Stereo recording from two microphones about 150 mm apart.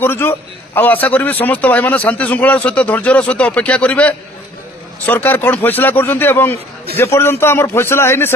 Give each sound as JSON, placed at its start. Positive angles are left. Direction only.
{"t": 0.0, "sound": "a man's voice", "side_deg": 15}